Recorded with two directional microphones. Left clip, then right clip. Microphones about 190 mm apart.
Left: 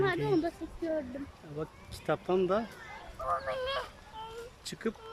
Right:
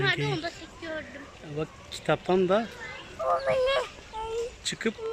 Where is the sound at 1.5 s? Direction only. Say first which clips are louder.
Right 6 dB; 5° left (ahead or behind).